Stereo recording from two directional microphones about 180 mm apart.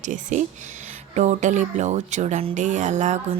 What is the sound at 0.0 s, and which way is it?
Speech, 45° right (ahead or behind).